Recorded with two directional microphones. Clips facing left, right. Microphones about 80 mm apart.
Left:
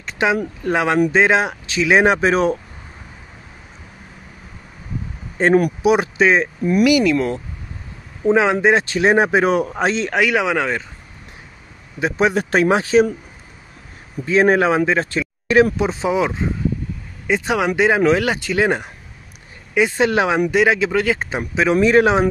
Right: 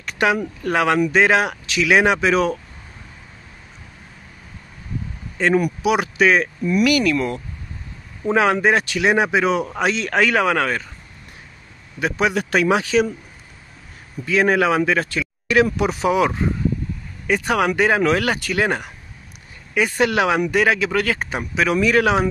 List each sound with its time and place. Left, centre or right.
0.0 s a sound: left
0.7 s speech: left
5.4 s a man's voice: left
6.8 s a man's voice: centre; by 9.7 s left
9.8 s a man's voice: left
10.1 s speech: centre
12.0 s a man's voice: left
14.2 s speech: left